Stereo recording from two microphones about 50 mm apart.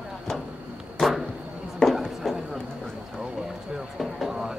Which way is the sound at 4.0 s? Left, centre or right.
Centre.